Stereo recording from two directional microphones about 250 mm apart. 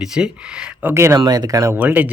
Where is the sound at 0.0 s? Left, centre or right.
Centre.